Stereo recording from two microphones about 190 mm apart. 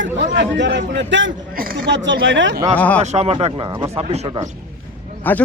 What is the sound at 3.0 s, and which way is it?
Speech, 35° right (ahead or behind).